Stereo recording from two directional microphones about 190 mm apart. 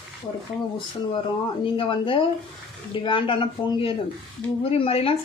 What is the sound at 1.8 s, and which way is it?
Speech, 25° left (ahead or behind).